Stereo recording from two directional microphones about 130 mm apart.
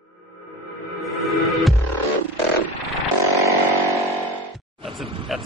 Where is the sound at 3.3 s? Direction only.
25° right (ahead or behind).